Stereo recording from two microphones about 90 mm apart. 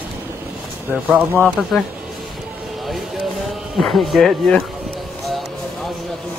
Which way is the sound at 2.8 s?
Centre (ahead or behind).